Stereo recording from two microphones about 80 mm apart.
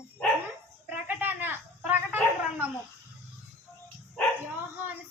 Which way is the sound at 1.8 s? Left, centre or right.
Centre.